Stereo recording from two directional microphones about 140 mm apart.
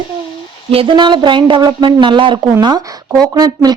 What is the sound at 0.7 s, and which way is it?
Speech, 40° right (ahead or behind).